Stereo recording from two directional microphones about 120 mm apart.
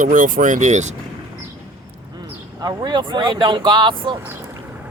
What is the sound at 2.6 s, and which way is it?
Speech, 35° right (ahead or behind).